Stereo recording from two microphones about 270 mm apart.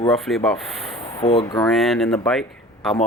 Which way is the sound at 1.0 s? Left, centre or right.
Left.